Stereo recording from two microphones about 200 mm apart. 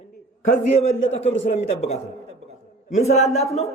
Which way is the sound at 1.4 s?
30° left (ahead or behind).